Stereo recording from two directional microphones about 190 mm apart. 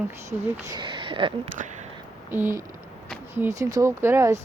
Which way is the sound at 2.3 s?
10° right (ahead or behind).